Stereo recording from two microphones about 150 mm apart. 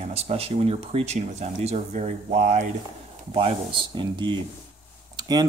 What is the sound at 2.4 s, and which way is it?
Speech, 60° right (ahead or behind).